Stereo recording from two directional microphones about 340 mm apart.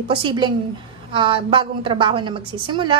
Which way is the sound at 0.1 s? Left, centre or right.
Centre.